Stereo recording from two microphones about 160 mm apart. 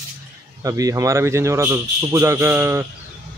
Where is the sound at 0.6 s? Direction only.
20° right (ahead or behind).